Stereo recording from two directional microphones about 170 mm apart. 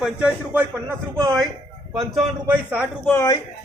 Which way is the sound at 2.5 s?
10° right (ahead or behind).